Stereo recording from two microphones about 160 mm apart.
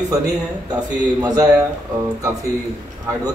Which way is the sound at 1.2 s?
25° right (ahead or behind).